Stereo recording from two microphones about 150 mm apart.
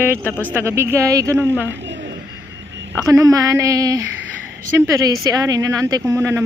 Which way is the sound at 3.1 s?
20° right (ahead or behind).